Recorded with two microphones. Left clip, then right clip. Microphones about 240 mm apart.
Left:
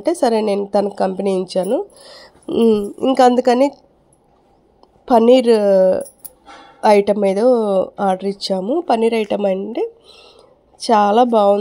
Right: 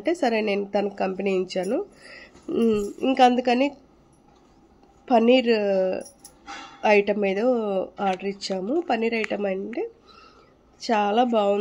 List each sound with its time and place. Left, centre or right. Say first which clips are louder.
0.0 s speech: left 7 dB; left
5.0 s a woman's voice: left 8 dB; left